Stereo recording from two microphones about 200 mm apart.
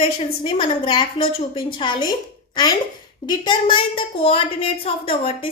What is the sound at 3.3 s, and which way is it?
A woman's voice, 25° left (ahead or behind).